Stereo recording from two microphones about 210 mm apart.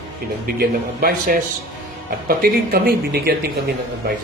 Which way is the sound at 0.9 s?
45° right (ahead or behind).